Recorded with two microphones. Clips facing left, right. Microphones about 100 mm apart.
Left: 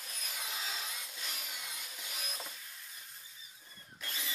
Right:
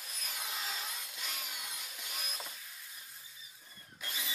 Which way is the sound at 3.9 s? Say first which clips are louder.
Even; 10° right (ahead or behind).